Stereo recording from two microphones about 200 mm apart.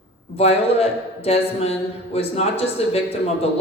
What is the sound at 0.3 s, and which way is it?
A man's voice, 30° left (ahead or behind).